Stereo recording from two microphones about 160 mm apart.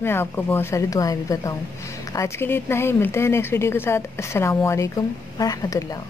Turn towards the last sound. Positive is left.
turn(degrees=25)  # may be behind; listen again after turning